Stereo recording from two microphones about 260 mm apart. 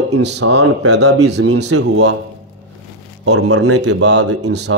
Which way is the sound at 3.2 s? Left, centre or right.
Right.